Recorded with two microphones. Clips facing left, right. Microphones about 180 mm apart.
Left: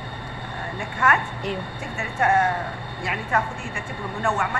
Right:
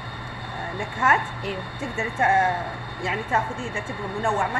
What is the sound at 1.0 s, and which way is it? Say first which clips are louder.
A woman's voice: left 1 dB; 25° right (ahead or behind).